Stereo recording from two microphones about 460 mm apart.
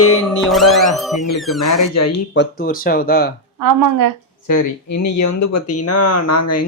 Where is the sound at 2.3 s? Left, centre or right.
Left.